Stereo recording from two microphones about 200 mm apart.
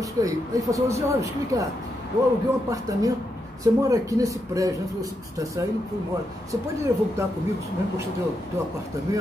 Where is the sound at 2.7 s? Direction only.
15° right (ahead or behind).